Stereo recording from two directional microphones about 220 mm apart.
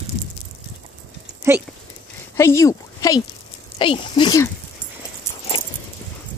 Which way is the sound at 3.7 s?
25° left (ahead or behind).